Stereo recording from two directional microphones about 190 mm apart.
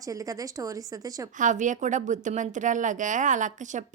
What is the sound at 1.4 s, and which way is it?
A woman's voice, 40° right (ahead or behind).